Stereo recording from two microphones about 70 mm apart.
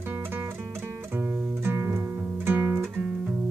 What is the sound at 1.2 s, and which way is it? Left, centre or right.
Music, right.